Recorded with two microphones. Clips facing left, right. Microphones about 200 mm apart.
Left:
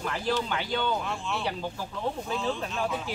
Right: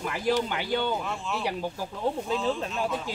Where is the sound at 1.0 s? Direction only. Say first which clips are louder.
Right 1 dB; 5° right (ahead or behind).